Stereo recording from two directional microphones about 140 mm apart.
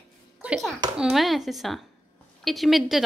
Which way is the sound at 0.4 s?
5° right (ahead or behind).